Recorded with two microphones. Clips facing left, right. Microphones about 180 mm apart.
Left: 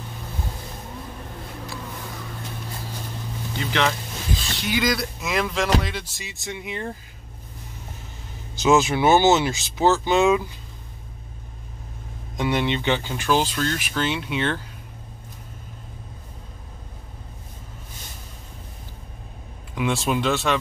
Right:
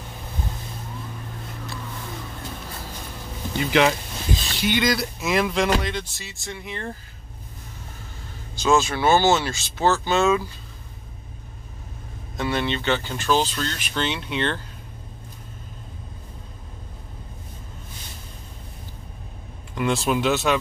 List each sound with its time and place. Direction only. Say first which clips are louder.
3.5 s speech: right 5 dB; 10° right (ahead or behind)
4.6 s speech: right 2 dB; centre (ahead or behind); by 6.9 s 15° left (ahead or behind)
8.5 s speech: left 2 dB; 20° left (ahead or behind)
12.4 s speech: left 2 dB; 15° left (ahead or behind)
19.7 s speech: right 1 dB; centre (ahead or behind)